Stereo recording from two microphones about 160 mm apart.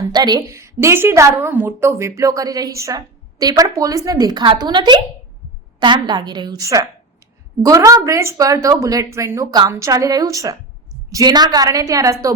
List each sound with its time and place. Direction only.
0.1 s a woman's voice: 25° right (ahead or behind)